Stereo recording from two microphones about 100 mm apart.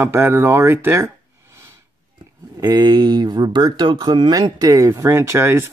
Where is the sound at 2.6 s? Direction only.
40° right (ahead or behind).